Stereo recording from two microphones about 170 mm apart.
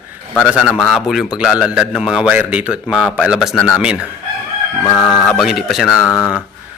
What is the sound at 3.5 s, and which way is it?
Speech, 10° left (ahead or behind).